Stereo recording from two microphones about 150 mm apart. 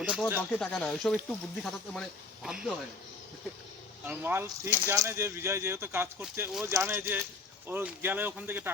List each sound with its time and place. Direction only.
0.0 s speech: 10° right (ahead or behind)
0.5 s speech: 5° left (ahead or behind)
4.0 s speech: 15° right (ahead or behind)